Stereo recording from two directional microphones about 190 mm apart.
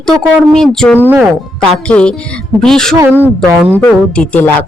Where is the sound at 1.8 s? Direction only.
5° left (ahead or behind).